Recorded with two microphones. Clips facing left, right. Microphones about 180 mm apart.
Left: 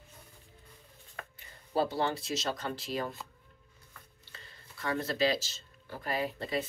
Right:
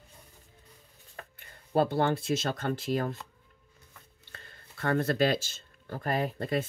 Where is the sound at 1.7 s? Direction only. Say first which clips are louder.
Right 4 dB; 55° right (ahead or behind).